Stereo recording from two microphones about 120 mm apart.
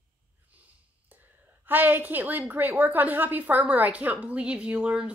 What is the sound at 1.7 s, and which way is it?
A woman's voice, 15° right (ahead or behind).